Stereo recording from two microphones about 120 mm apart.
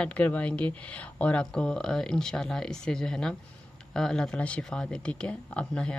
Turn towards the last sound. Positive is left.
turn(degrees=10)  # may be behind; listen again after turning